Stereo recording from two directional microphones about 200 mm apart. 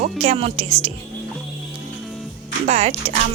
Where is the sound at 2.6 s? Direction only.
35° right (ahead or behind).